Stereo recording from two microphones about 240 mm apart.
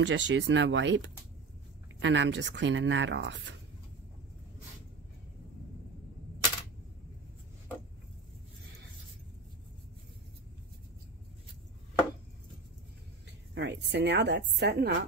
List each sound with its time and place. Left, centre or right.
0.0 s speech: right
13.6 s speech: right